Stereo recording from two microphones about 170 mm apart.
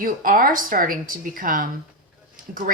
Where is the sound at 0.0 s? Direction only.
55° right (ahead or behind).